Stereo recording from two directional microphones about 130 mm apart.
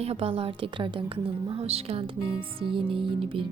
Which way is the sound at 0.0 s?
50° right (ahead or behind).